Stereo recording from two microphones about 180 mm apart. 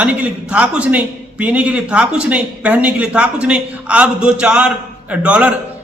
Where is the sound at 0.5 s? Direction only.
5° right (ahead or behind).